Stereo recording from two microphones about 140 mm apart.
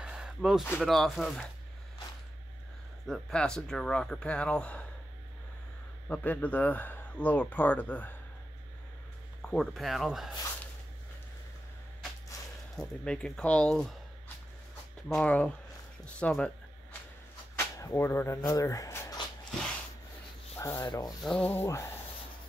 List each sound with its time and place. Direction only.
0.0 s a sound: 5° right (ahead or behind)
0.7 s speech: centre (ahead or behind)
3.1 s speech: 5° left (ahead or behind)
6.0 s speech: 10° left (ahead or behind)
9.5 s speech: centre (ahead or behind)
12.7 s speech: 5° left (ahead or behind)
15.0 s speech: 5° left (ahead or behind)
17.6 s speech: 20° left (ahead or behind)
20.5 s sanding: 15° left (ahead or behind)
20.8 s rub: 30° left (ahead or behind)
21.2 s speech: 5° left (ahead or behind)
21.5 s speech: 20° left (ahead or behind)